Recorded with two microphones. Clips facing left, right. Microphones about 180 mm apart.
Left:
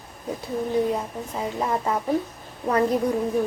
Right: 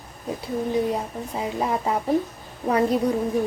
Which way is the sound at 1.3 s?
15° right (ahead or behind).